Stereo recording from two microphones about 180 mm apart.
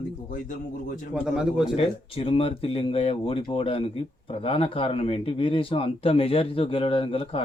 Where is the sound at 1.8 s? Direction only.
30° left (ahead or behind).